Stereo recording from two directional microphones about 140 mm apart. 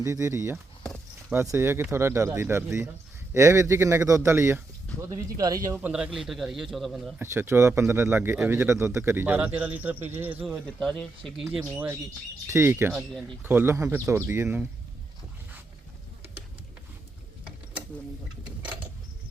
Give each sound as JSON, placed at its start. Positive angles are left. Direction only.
{"t": 0.0, "sound": "speech", "side_deg": -20}
{"t": 0.8, "sound": "a sound", "side_deg": 10}
{"t": 1.3, "sound": "speech", "side_deg": -15}
{"t": 5.8, "sound": "a man's voice", "side_deg": -5}
{"t": 7.2, "sound": "speech", "side_deg": -15}
{"t": 10.7, "sound": "a man's voice", "side_deg": 5}
{"t": 12.5, "sound": "speech", "side_deg": -20}
{"t": 12.9, "sound": "a man's voice", "side_deg": 0}
{"t": 13.4, "sound": "speech", "side_deg": -15}
{"t": 18.6, "sound": "a sound", "side_deg": -10}